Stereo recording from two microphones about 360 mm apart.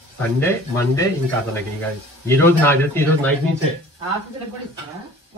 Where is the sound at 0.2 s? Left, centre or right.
Centre.